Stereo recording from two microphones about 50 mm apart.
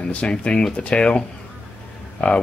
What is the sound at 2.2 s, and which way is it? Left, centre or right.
Speech, left.